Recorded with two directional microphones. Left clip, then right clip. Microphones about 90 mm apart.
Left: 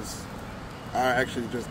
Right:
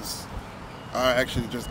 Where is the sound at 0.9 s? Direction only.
40° right (ahead or behind).